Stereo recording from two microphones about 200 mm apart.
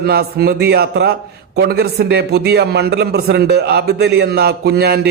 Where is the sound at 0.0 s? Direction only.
50° right (ahead or behind).